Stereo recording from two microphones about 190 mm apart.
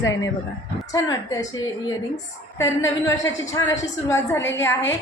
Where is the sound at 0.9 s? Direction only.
20° left (ahead or behind).